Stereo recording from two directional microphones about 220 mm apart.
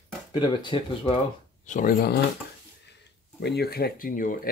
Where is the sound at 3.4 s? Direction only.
45° left (ahead or behind).